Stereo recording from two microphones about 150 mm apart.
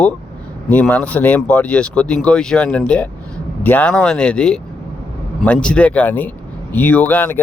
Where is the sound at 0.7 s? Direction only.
10° left (ahead or behind).